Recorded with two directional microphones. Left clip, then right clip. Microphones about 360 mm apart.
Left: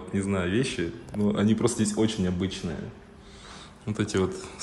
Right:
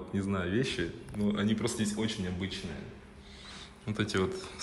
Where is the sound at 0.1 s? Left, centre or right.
Centre.